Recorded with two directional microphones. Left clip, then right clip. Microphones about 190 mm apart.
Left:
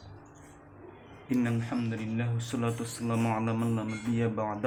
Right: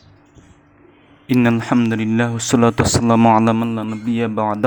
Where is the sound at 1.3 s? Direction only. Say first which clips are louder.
Right 15 dB; 45° right (ahead or behind).